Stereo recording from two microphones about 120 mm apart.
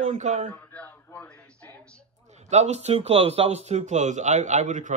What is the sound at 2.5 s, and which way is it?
A man's voice, 70° right (ahead or behind).